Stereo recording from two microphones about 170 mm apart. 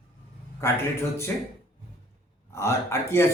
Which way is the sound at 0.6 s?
15° left (ahead or behind).